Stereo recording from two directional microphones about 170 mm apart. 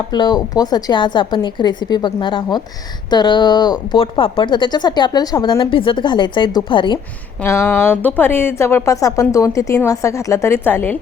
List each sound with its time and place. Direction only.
0.1 s speech: 25° left (ahead or behind)
7.4 s a woman's voice: 15° left (ahead or behind)